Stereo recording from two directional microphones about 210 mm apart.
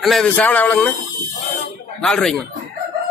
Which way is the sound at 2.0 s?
Centre (ahead or behind).